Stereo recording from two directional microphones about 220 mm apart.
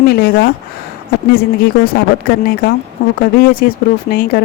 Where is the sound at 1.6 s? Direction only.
45° left (ahead or behind).